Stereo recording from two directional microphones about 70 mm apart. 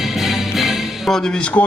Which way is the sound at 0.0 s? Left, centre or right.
Centre.